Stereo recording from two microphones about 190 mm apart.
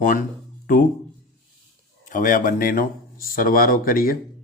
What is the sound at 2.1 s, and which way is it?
Speech, 45° left (ahead or behind).